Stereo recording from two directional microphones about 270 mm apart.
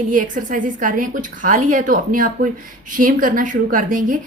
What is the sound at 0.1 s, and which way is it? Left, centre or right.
A woman's voice, right.